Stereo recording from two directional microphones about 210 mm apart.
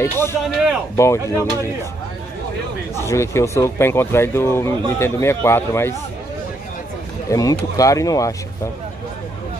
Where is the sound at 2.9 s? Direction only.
15° left (ahead or behind).